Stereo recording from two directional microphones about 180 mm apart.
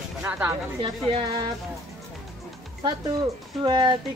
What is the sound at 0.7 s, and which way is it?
Speech, 25° right (ahead or behind).